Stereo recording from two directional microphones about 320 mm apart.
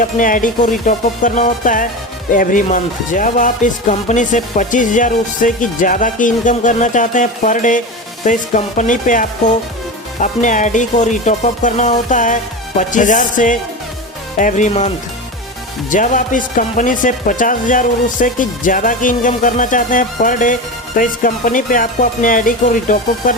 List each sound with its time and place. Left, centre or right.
0.0 s speech: left